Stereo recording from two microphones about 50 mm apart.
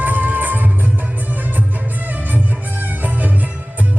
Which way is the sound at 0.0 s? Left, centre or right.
Right.